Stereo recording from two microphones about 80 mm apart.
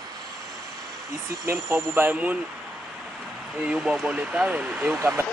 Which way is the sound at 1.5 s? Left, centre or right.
Right.